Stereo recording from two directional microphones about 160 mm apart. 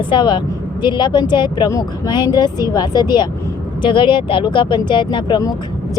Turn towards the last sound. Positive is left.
turn(degrees=25)  # may be behind; listen again after turning